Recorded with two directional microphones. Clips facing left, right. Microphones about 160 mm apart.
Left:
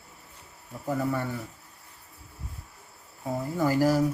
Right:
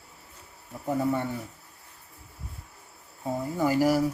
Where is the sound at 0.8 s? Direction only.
20° right (ahead or behind).